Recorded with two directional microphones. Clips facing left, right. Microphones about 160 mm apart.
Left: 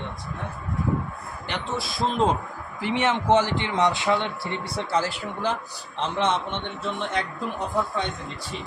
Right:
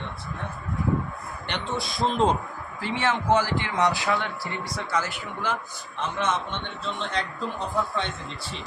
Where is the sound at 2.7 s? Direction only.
20° left (ahead or behind).